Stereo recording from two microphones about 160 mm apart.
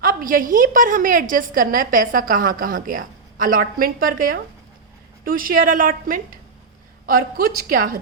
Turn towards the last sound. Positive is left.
turn(degrees=-65)  # may be behind; listen again after turning